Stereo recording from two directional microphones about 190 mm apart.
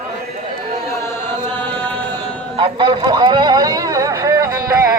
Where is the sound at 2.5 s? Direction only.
25° right (ahead or behind).